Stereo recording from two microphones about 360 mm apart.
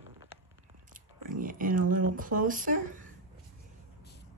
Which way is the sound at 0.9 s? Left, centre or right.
Right.